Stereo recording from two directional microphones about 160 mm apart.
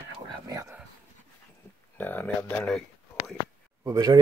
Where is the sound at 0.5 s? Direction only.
20° right (ahead or behind).